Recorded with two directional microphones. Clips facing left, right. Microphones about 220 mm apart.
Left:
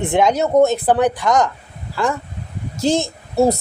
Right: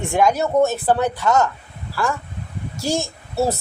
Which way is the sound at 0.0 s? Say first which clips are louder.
Left 2 dB; 20° left (ahead or behind).